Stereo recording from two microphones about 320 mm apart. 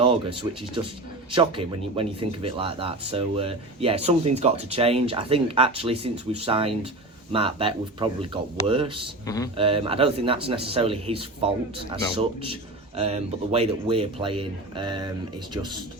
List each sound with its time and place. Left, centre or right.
0.0 s speech: centre
9.2 s speech: centre
9.6 s speech: centre